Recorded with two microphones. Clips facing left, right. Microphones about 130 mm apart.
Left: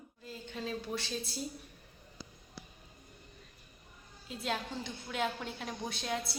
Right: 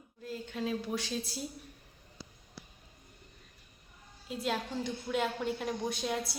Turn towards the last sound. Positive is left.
turn(degrees=-5)  # may be behind; listen again after turning